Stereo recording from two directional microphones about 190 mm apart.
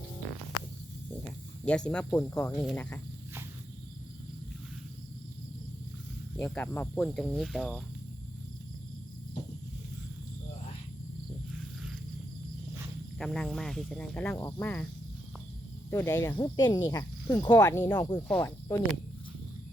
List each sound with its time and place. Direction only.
1.6 s speech: 5° left (ahead or behind)
6.3 s speech: 10° left (ahead or behind)
13.1 s speech: 5° left (ahead or behind)
15.9 s speech: 15° left (ahead or behind)